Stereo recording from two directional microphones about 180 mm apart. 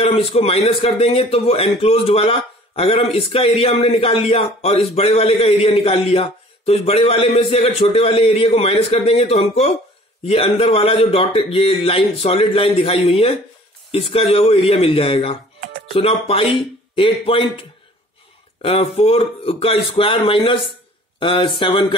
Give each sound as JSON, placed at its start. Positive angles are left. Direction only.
{"t": 0.0, "sound": "speech", "side_deg": 35}